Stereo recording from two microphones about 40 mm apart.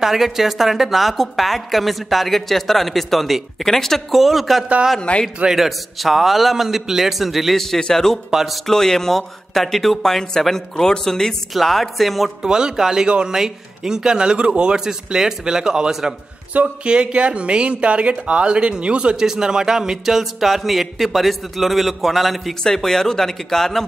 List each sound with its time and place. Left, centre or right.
0.0 s speech: centre
5.1 s a man's voice: left
5.5 s speech: centre
7.5 s speech: centre
12.4 s speech: centre
16.8 s speech: right
19.1 s speech: centre
22.6 s speech: centre